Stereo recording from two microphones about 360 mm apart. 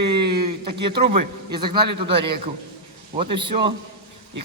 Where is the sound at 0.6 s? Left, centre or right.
Centre.